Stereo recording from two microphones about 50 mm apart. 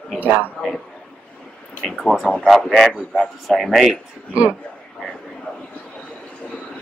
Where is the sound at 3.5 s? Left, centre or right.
Centre.